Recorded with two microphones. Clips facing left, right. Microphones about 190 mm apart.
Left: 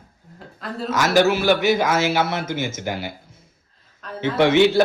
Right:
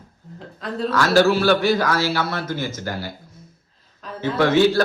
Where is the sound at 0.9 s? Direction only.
15° left (ahead or behind).